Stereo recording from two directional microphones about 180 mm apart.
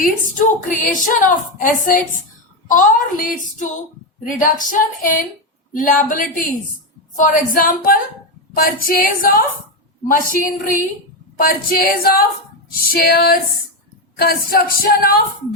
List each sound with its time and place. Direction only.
0.3 s a woman's voice: 45° left (ahead or behind)